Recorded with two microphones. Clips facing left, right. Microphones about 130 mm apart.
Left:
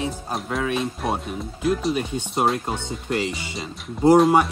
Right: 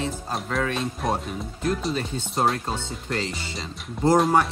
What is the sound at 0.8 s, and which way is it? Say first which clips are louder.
Speech: left 1 dB; centre (ahead or behind).